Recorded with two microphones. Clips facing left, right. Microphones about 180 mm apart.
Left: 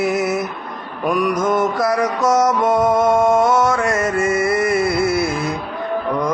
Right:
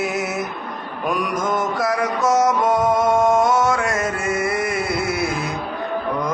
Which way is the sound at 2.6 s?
10° left (ahead or behind).